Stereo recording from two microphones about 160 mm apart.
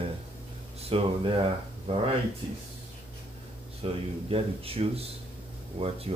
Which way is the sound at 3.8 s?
35° right (ahead or behind).